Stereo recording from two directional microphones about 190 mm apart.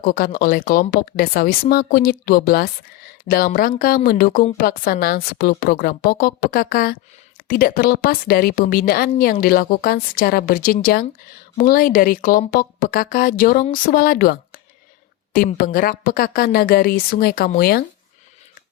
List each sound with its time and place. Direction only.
0.0 s a woman's voice: 50° left (ahead or behind)